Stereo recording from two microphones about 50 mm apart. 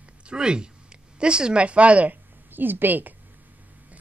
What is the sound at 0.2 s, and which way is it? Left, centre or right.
A woman's voice, centre.